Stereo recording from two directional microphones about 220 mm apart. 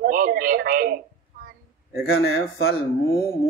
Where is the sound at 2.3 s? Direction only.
70° left (ahead or behind).